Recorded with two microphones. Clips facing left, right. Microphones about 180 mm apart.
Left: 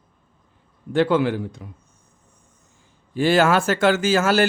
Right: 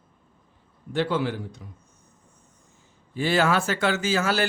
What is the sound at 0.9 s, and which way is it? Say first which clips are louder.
Speech: left 6 dB; 60° left (ahead or behind).